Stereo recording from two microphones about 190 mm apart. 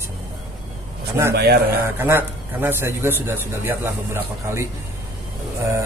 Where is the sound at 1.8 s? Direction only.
10° right (ahead or behind).